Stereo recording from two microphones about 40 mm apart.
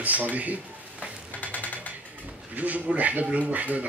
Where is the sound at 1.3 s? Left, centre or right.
Left.